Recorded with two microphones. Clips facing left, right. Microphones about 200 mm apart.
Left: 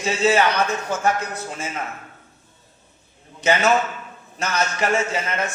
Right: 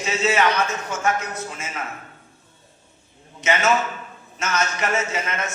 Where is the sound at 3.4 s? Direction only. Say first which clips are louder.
Left 2 dB; 35° left (ahead or behind).